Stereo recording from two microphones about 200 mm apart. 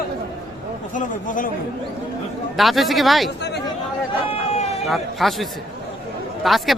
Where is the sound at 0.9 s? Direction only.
40° left (ahead or behind).